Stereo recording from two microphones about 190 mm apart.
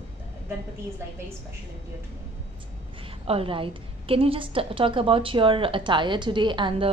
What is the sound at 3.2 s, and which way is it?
A woman's voice, 30° right (ahead or behind).